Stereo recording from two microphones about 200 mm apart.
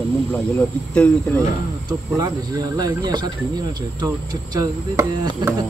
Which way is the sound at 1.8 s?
20° right (ahead or behind).